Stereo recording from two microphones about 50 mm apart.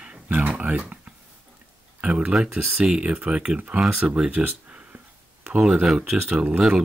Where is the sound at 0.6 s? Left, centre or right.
Right.